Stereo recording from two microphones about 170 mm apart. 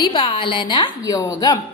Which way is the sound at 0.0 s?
30° left (ahead or behind).